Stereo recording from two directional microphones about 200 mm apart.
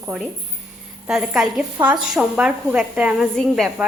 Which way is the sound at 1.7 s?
20° right (ahead or behind).